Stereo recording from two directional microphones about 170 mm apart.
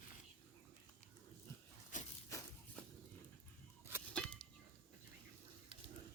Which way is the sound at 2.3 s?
20° left (ahead or behind).